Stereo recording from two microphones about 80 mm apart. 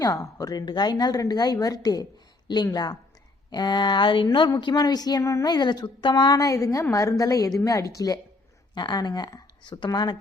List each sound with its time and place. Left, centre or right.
0.0 s speech: left
3.5 s speech: left
5.2 s a woman's voice: left
5.5 s a woman's voice: left
6.3 s speech: left
8.7 s speech: left